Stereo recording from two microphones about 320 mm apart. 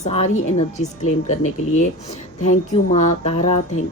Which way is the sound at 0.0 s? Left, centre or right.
Left.